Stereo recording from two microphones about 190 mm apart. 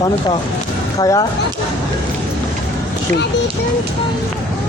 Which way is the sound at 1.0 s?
20° left (ahead or behind).